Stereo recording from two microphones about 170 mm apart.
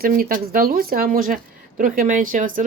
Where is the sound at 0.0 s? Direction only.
55° right (ahead or behind).